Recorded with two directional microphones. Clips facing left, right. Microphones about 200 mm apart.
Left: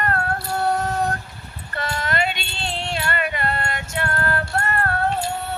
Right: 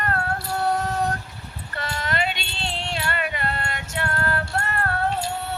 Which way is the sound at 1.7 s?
50° left (ahead or behind).